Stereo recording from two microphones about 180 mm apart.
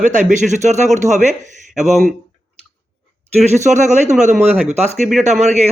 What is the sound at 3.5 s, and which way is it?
A man's voice, 40° right (ahead or behind).